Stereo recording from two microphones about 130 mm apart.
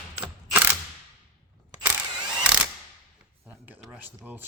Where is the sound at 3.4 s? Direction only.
15° right (ahead or behind).